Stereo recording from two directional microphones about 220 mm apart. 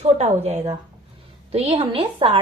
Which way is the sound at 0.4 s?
30° right (ahead or behind).